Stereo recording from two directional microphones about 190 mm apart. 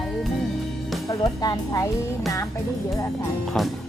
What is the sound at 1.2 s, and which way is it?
Speech, 20° left (ahead or behind).